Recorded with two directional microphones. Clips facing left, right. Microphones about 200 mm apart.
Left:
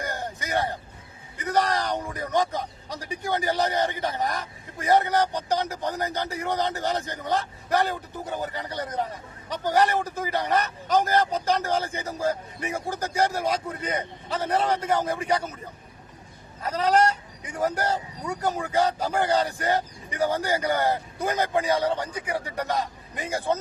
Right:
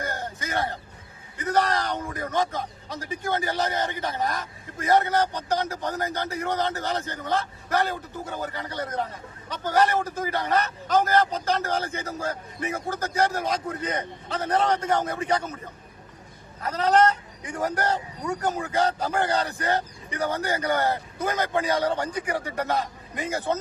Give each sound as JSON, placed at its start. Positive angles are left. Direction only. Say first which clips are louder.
{"t": 0.0, "sound": "a sound", "louder": "even", "side_deg": 15}
{"t": 1.4, "sound": "a man's voice", "louder": "right 1 dB", "side_deg": 15}
{"t": 16.6, "sound": "a man's voice", "louder": "right 1 dB", "side_deg": 10}